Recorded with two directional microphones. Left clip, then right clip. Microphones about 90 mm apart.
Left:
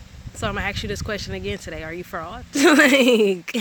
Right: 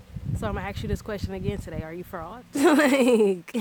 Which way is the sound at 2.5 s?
45° right (ahead or behind).